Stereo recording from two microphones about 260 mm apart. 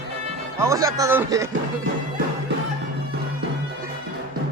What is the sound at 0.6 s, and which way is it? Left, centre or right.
Speech, centre.